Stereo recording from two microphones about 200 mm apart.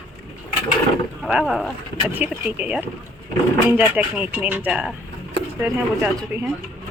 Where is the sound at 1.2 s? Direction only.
Centre (ahead or behind).